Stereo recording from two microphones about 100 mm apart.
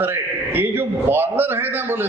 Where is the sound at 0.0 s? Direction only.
20° right (ahead or behind).